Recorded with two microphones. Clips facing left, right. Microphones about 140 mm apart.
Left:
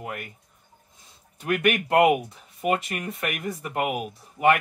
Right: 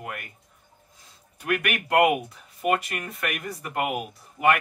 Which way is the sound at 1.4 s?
25° left (ahead or behind).